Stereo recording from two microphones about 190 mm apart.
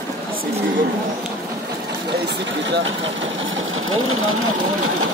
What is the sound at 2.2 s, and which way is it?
Speech, 65° right (ahead or behind).